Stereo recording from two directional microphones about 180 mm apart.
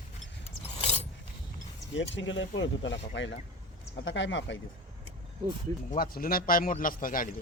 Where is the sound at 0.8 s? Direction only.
35° left (ahead or behind).